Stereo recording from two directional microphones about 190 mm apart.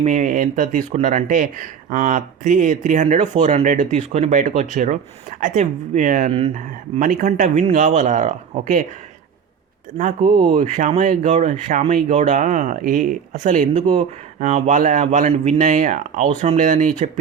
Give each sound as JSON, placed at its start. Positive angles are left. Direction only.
{"t": 0.0, "sound": "speech", "side_deg": -40}
{"t": 6.3, "sound": "speech", "side_deg": -35}
{"t": 10.0, "sound": "speech", "side_deg": -40}